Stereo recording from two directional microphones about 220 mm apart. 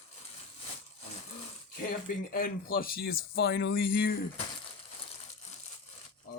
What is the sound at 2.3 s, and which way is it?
Speech, 40° left (ahead or behind).